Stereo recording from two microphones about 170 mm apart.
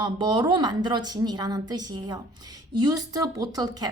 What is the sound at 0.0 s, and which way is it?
A woman's voice, 25° right (ahead or behind).